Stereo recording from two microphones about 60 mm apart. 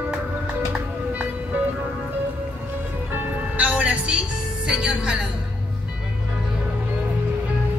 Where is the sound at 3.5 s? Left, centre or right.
Right.